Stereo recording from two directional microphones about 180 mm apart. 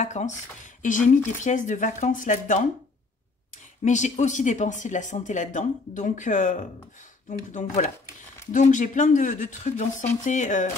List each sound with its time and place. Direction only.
0.0 s speech: 40° left (ahead or behind)
3.8 s speech: 40° left (ahead or behind)